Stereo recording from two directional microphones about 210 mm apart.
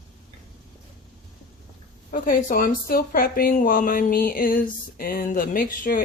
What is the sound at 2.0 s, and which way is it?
Speech, 40° left (ahead or behind).